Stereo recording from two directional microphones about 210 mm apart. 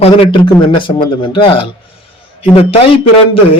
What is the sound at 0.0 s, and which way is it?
A man's voice, 25° left (ahead or behind).